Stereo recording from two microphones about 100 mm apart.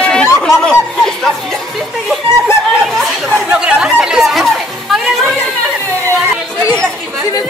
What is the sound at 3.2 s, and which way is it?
Chatter, 10° right (ahead or behind).